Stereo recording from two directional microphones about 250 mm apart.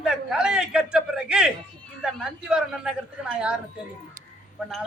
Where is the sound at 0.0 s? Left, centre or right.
Centre.